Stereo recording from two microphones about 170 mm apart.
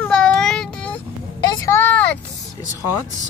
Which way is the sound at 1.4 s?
20° left (ahead or behind).